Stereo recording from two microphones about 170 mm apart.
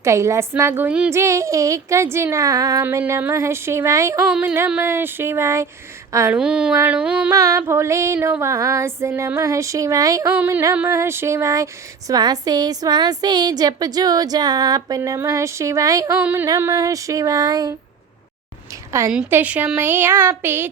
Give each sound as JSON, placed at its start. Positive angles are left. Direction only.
{"t": 0.0, "sound": "female singing", "side_deg": -15}
{"t": 1.2, "sound": "female singing", "side_deg": -20}
{"t": 4.3, "sound": "female singing", "side_deg": -5}
{"t": 6.4, "sound": "a woman's voice", "side_deg": -5}
{"t": 6.7, "sound": "female singing", "side_deg": -10}
{"t": 7.3, "sound": "female singing", "side_deg": -15}
{"t": 10.8, "sound": "a sound", "side_deg": -15}
{"t": 18.9, "sound": "a woman's voice", "side_deg": -15}
{"t": 19.1, "sound": "female singing", "side_deg": -10}